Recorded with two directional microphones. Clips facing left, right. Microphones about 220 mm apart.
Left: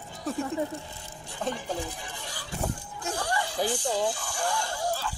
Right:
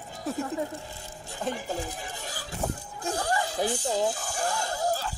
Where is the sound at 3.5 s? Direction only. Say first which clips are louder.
Left 2 dB; 25° right (ahead or behind).